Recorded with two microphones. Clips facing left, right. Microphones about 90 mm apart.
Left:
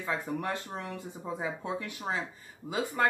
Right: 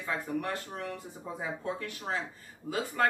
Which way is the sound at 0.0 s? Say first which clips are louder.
Left 1 dB; 20° left (ahead or behind).